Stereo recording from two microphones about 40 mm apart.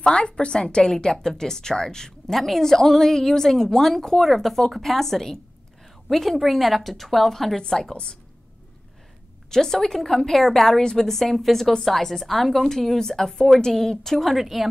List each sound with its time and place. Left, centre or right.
0.0 s a woman's voice: left
9.5 s a woman's voice: centre